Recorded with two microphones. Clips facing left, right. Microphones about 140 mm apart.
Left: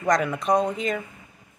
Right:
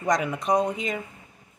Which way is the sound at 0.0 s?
15° right (ahead or behind).